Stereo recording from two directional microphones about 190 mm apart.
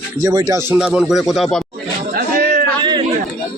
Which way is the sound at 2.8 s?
25° right (ahead or behind).